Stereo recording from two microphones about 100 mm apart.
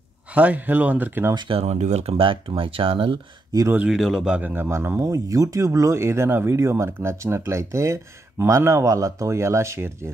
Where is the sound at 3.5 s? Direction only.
40° right (ahead or behind).